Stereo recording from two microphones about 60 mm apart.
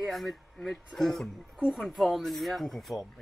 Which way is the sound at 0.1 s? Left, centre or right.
Centre.